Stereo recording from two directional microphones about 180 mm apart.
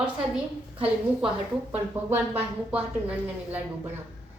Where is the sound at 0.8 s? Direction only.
5° right (ahead or behind).